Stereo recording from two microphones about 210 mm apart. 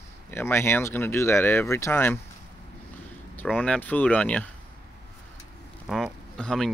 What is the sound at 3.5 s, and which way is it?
Speech, 5° left (ahead or behind).